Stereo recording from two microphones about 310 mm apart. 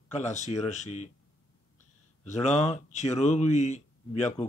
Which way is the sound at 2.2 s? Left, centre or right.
Left.